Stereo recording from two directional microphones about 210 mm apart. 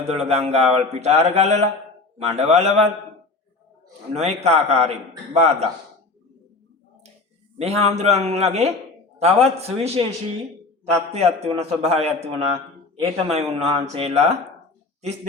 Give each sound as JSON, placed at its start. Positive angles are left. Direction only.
{"t": 0.0, "sound": "mantra", "side_deg": -30}
{"t": 4.1, "sound": "mantra", "side_deg": -30}
{"t": 7.6, "sound": "mantra", "side_deg": -30}
{"t": 9.1, "sound": "speech", "side_deg": -30}
{"t": 11.1, "sound": "speech", "side_deg": -30}